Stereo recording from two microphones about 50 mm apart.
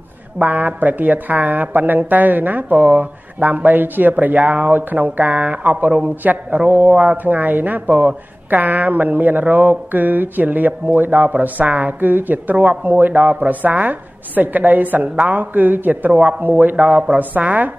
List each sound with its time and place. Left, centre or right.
0.4 s a woman's voice: right
16.1 s a man's voice: right